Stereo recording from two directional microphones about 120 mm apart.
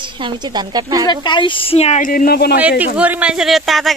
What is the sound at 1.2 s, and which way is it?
Speech, 40° left (ahead or behind).